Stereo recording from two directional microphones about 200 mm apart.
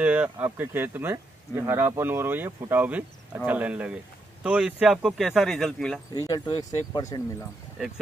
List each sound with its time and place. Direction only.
0.0 s speech: 5° right (ahead or behind)
6.1 s speech: 20° left (ahead or behind)